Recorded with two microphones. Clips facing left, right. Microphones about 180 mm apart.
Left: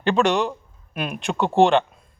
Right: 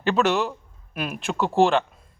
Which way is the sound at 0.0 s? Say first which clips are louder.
Left 2 dB; 5° right (ahead or behind).